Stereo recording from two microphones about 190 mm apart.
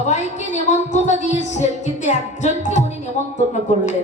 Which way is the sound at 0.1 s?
40° left (ahead or behind).